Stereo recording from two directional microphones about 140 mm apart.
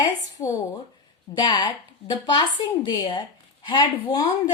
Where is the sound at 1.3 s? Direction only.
30° left (ahead or behind).